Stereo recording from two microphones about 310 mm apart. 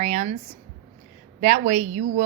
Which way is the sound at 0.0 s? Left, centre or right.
Right.